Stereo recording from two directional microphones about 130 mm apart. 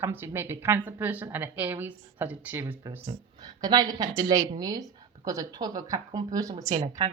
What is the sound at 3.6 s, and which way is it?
A woman's voice, 30° right (ahead or behind).